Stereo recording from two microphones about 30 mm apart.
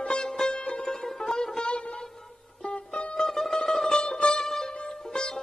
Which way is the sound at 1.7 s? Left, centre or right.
Left.